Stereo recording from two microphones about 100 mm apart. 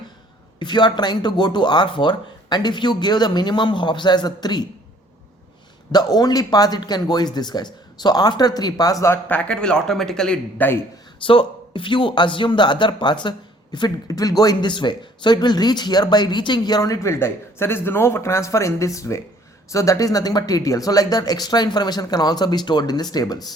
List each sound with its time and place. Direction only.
0.6 s speech: 50° left (ahead or behind)
5.9 s speech: 45° left (ahead or behind)
9.3 s speech: 10° left (ahead or behind)
11.3 s speech: 60° left (ahead or behind); by 23.5 s 40° left (ahead or behind)